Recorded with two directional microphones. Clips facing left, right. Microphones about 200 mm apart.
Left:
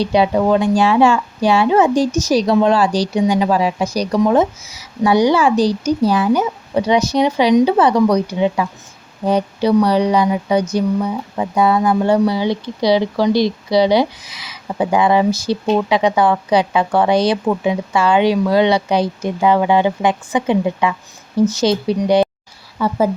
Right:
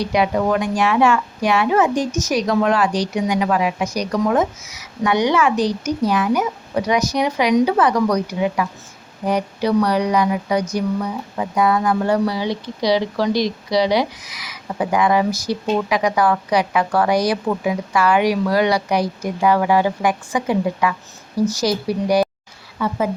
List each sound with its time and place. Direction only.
0.0 s speech: 30° left (ahead or behind)
22.8 s speech: 35° left (ahead or behind)